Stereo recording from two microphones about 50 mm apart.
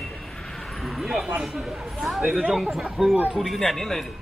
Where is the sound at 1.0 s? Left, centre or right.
Centre.